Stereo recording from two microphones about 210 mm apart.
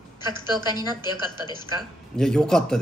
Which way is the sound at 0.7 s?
20° left (ahead or behind).